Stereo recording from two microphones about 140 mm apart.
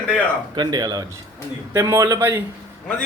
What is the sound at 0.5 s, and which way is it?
Speech, 30° right (ahead or behind).